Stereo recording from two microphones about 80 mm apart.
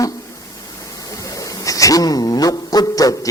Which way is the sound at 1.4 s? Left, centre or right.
Left.